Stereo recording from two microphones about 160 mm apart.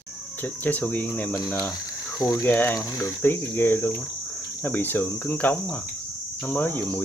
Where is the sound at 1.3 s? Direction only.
25° left (ahead or behind).